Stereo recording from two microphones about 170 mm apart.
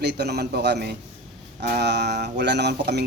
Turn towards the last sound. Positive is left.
turn(degrees=-75)  # may be behind; listen again after turning